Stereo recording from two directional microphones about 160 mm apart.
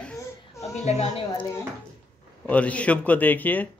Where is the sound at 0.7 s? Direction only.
45° left (ahead or behind).